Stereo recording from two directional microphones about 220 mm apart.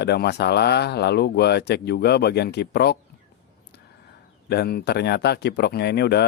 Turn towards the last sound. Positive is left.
turn(degrees=50)  # may be behind; listen again after turning